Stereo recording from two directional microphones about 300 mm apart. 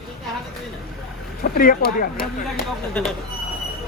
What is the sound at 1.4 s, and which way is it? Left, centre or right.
Speech, left.